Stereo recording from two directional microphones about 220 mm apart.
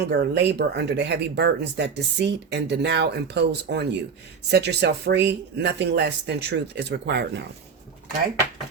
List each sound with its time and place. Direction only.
0.0 s speech: 50° right (ahead or behind)